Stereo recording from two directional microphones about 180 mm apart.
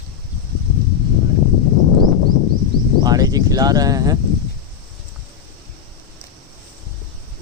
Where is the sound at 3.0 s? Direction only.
20° right (ahead or behind).